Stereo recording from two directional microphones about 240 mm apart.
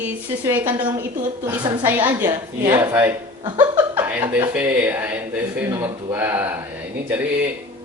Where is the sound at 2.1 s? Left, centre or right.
Centre.